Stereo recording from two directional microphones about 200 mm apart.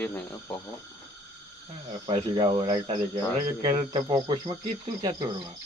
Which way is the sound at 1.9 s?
25° right (ahead or behind).